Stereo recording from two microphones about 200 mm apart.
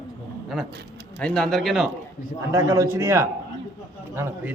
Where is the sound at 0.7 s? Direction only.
55° right (ahead or behind).